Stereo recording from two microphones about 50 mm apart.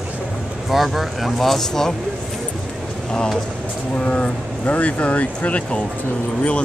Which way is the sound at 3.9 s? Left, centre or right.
Left.